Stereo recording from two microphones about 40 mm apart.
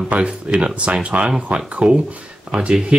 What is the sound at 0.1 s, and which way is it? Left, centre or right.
Speech, right.